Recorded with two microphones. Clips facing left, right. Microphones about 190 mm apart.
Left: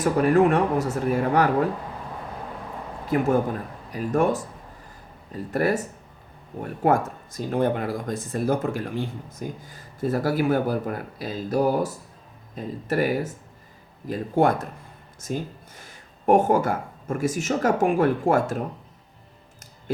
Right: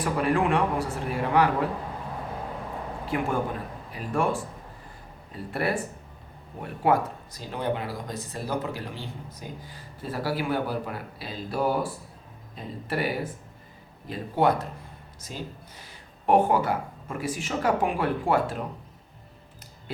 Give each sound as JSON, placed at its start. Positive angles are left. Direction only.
{"t": 0.0, "sound": "speech", "side_deg": 45}
{"t": 3.1, "sound": "speech", "side_deg": 40}
{"t": 5.5, "sound": "speech", "side_deg": 45}
{"t": 6.8, "sound": "speech", "side_deg": 45}